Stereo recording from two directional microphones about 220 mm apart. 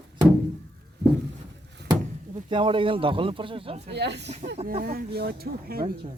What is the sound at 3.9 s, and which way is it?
Speech, 50° right (ahead or behind).